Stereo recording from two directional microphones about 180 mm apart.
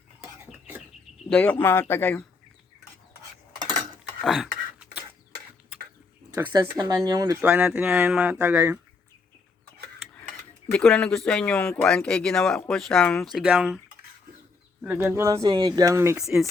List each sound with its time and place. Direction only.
1.3 s speech: 5° left (ahead or behind)
4.2 s a sound: centre (ahead or behind)
6.3 s speech: 20° right (ahead or behind)
10.7 s speech: 5° left (ahead or behind); by 16.1 s 15° right (ahead or behind)
16.1 s speech: centre (ahead or behind)